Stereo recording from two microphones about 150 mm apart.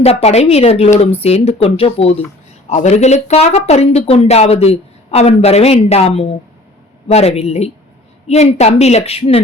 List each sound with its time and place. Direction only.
0.0 s speech: 45° left (ahead or behind)